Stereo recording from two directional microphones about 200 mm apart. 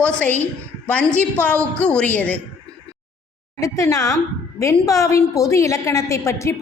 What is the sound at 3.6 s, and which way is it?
A woman's voice, 15° left (ahead or behind).